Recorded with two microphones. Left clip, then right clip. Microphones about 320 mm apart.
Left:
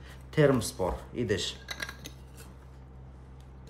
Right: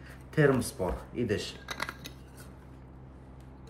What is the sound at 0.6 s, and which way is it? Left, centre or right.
Speech, centre.